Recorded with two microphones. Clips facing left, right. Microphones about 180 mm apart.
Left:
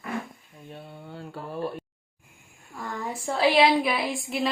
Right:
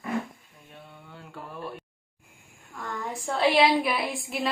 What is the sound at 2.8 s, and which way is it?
A woman's voice, 5° left (ahead or behind).